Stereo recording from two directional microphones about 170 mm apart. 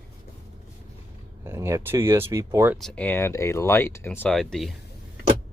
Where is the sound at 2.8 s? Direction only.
5° left (ahead or behind).